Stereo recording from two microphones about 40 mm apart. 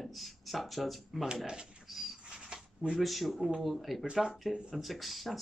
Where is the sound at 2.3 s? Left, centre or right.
Centre.